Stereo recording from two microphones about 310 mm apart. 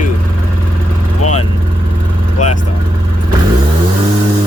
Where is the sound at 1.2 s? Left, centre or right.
Left.